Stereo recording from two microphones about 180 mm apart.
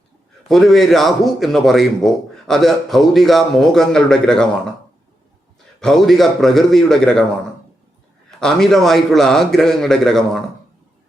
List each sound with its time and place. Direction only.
0.4 s a man's voice: centre (ahead or behind)
5.8 s a man's voice: centre (ahead or behind)
8.4 s a man's voice: 5° left (ahead or behind)